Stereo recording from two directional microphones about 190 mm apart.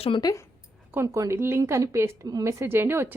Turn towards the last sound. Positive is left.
turn(degrees=-10)  # may be behind; listen again after turning